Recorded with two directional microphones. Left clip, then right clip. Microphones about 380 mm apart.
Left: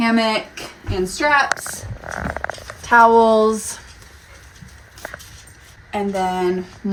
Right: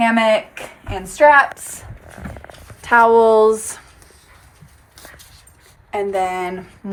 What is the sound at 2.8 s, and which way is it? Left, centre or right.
Speech, right.